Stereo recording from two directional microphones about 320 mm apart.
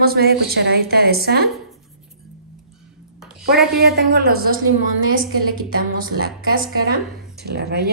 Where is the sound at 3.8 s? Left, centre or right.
Right.